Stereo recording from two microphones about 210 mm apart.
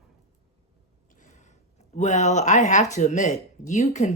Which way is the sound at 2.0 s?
35° left (ahead or behind).